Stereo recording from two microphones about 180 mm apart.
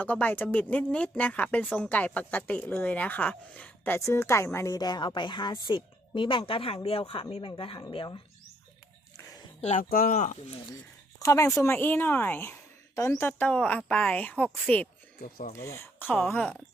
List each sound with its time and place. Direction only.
0.0 s speech: 10° left (ahead or behind); by 8.2 s 25° left (ahead or behind)
9.6 s speech: 40° left (ahead or behind)
11.3 s speech: 15° left (ahead or behind)
15.2 s speech: 50° left (ahead or behind)
15.5 s speech: 15° left (ahead or behind)